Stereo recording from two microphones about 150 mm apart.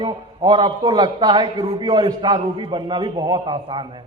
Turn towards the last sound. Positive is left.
turn(degrees=-30)  # may be behind; listen again after turning